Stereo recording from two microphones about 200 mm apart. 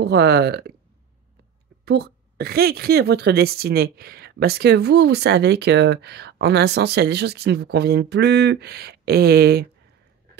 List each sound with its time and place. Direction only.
0.0 s a woman's voice: 55° right (ahead or behind)
1.9 s a woman's voice: 55° right (ahead or behind)